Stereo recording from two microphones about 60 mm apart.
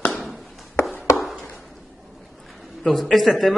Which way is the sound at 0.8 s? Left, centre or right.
Left.